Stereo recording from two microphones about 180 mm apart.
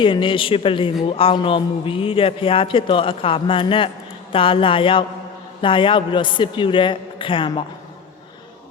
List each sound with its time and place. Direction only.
0.0 s a man's voice: 30° left (ahead or behind)